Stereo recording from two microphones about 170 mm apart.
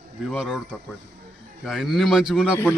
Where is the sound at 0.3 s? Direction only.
Centre (ahead or behind).